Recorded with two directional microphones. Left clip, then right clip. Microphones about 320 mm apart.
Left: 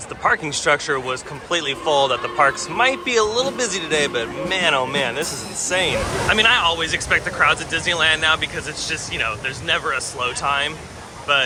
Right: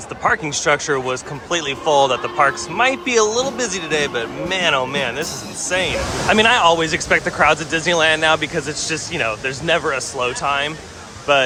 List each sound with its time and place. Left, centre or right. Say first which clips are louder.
0.2 s speech: right 1 dB; centre